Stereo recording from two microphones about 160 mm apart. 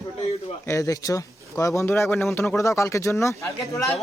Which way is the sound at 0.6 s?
20° left (ahead or behind).